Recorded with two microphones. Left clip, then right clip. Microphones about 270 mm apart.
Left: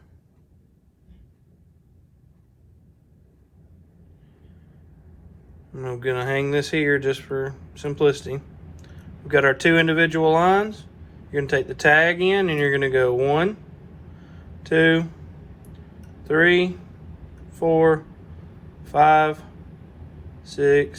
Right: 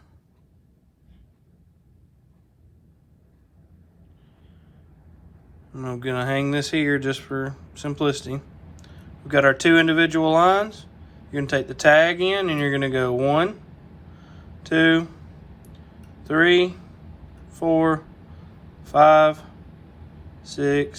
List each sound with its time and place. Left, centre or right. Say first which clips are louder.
5.7 s speech: left 2 dB; right
14.6 s speech: even; right
16.2 s speech: even; right